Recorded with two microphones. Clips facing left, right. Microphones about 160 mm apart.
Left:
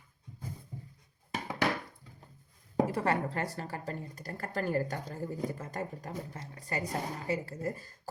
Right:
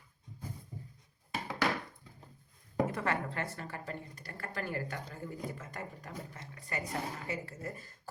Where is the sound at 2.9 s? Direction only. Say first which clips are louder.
Left 4 dB; 35° left (ahead or behind).